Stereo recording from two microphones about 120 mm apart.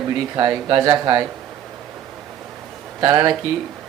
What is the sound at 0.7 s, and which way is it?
Speech, 35° right (ahead or behind).